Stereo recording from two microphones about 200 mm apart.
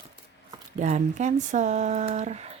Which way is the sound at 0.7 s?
35° right (ahead or behind).